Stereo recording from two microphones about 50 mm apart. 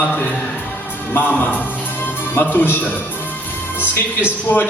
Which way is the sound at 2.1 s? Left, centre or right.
Left.